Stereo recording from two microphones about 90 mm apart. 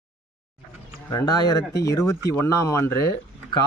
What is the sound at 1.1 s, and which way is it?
A woman's voice, 45° left (ahead or behind).